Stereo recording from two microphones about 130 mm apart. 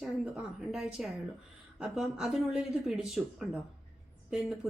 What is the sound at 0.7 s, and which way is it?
A woman's voice, 5° right (ahead or behind).